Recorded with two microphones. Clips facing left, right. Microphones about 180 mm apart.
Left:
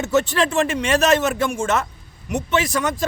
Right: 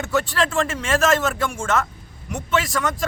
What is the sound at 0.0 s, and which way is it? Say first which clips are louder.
Speech: left 3 dB; 20° left (ahead or behind).